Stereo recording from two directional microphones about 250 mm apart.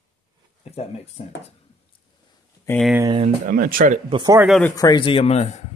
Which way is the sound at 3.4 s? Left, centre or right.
Right.